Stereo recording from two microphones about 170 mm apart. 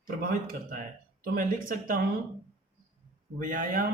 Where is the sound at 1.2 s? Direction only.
55° right (ahead or behind).